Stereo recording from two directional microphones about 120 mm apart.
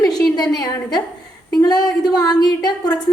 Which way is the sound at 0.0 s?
35° left (ahead or behind).